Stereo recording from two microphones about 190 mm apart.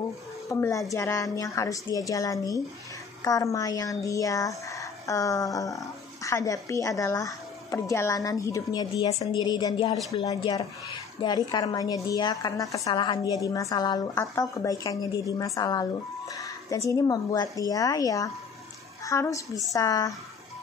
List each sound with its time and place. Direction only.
0.5 s a woman's voice: 15° left (ahead or behind)